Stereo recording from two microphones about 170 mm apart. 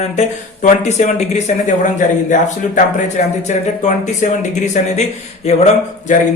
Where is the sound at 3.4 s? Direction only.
45° left (ahead or behind).